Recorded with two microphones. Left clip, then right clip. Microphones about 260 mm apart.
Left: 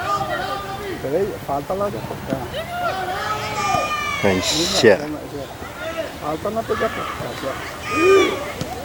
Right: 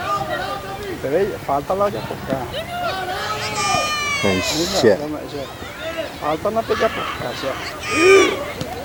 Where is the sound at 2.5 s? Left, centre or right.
Centre.